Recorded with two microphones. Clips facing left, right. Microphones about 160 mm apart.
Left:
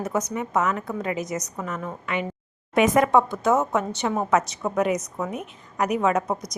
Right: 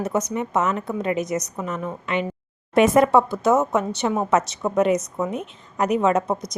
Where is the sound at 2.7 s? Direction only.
15° left (ahead or behind).